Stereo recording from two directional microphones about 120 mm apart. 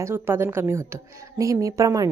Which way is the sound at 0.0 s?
20° right (ahead or behind).